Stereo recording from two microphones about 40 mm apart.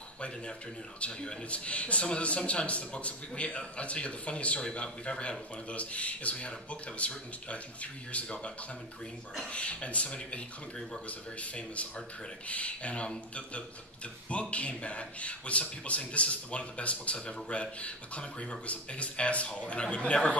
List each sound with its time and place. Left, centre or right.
1.0 s a man's voice: left
9.5 s a man's voice: left